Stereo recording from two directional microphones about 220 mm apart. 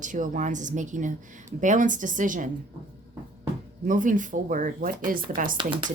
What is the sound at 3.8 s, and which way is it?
Speech, 35° right (ahead or behind).